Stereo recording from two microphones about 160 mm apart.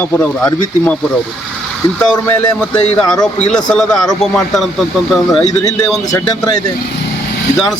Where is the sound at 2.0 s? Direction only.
15° left (ahead or behind).